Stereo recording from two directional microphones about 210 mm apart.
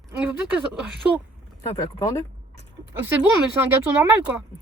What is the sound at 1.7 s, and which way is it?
Speech, 15° left (ahead or behind).